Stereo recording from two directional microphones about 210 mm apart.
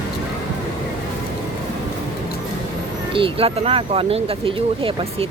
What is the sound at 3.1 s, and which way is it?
Speech, 25° right (ahead or behind).